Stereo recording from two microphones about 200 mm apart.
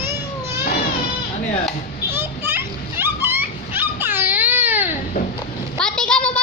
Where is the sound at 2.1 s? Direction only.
10° right (ahead or behind).